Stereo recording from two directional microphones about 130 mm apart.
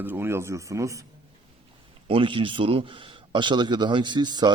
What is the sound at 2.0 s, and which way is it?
A man's voice, 40° right (ahead or behind).